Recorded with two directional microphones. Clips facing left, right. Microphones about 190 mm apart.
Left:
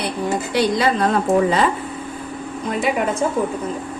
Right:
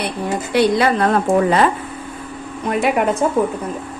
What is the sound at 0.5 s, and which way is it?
Speech, 60° right (ahead or behind).